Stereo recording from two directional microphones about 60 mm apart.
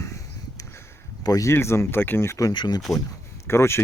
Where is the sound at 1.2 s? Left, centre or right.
Left.